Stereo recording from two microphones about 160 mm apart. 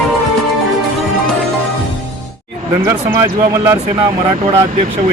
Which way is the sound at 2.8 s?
20° right (ahead or behind).